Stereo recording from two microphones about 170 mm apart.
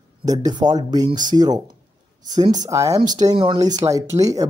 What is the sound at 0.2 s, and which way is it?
Speech, 20° right (ahead or behind).